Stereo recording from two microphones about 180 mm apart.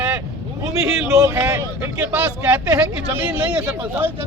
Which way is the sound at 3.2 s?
10° right (ahead or behind).